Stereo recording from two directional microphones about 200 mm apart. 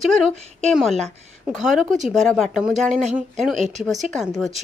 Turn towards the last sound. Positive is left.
turn(degrees=0)  # may be behind; listen again after turning